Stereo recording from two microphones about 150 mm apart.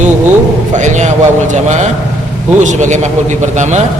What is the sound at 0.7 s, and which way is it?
A man's voice, 50° right (ahead or behind).